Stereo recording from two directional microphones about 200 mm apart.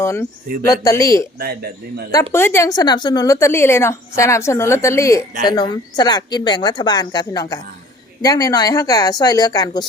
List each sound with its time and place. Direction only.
0.0 s a woman's voice: 15° left (ahead or behind)
2.3 s a woman's voice: 10° left (ahead or behind)